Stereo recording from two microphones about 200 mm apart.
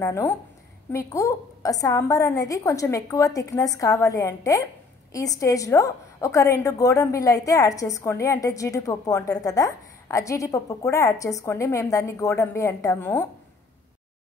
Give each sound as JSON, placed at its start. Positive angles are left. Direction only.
{"t": 0.0, "sound": "a woman's voice", "side_deg": 10}